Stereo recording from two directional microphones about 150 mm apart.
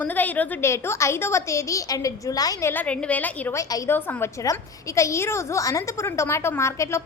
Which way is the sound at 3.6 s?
20° left (ahead or behind).